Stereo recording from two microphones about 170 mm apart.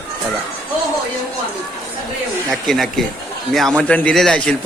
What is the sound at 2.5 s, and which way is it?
A man's voice, centre (ahead or behind).